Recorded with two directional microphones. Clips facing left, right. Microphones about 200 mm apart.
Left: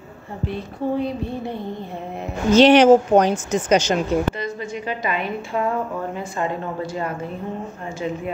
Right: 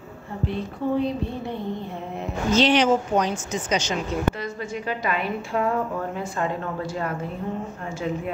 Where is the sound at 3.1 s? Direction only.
60° left (ahead or behind).